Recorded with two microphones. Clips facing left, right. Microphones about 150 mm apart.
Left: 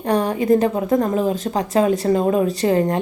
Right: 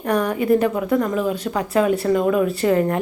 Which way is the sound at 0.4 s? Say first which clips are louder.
Left 1 dB; 40° left (ahead or behind).